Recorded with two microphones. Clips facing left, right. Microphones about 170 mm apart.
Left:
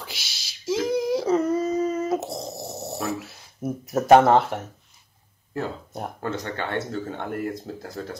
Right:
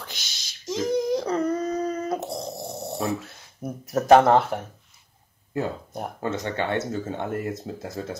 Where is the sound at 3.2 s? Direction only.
5° left (ahead or behind).